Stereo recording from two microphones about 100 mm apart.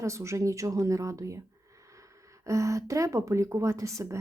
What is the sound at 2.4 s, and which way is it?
Speech, 30° right (ahead or behind).